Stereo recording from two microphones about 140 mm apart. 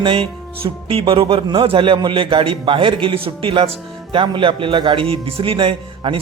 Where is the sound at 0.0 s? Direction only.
40° right (ahead or behind).